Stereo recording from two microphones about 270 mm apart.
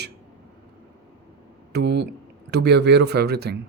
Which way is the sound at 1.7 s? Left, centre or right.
Right.